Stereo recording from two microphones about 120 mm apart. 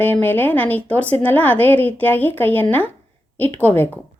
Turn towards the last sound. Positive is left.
turn(degrees=15)  # may be behind; listen again after turning